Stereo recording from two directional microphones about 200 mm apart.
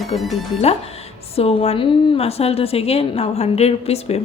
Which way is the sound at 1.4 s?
30° left (ahead or behind).